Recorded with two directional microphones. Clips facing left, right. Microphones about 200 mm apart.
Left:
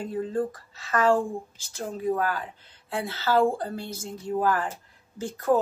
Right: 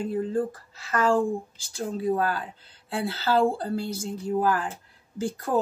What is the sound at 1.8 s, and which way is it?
Speech, 35° right (ahead or behind).